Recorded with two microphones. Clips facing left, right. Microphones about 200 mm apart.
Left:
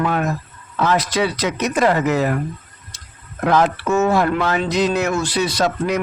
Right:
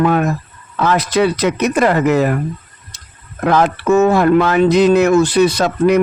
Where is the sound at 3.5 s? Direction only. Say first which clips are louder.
Right 4 dB; 60° right (ahead or behind).